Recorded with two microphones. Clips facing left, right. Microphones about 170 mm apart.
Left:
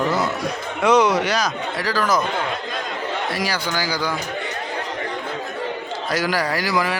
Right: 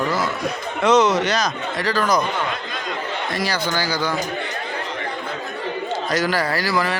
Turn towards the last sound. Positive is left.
turn(degrees=15)  # may be behind; listen again after turning